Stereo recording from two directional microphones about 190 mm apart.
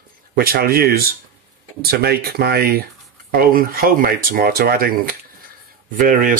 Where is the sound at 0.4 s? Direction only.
50° right (ahead or behind).